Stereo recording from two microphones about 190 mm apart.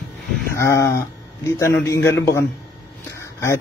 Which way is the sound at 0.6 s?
15° left (ahead or behind).